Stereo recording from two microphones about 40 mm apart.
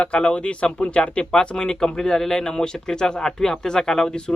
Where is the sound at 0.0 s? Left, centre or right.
Left.